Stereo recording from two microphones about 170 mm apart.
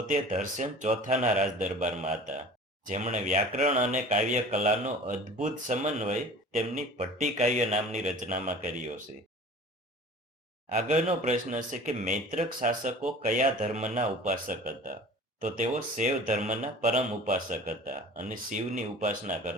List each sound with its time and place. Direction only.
0.1 s speech: 45° right (ahead or behind)
10.8 s speech: 45° right (ahead or behind)